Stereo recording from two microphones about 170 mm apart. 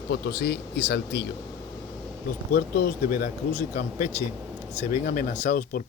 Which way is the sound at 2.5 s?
65° left (ahead or behind).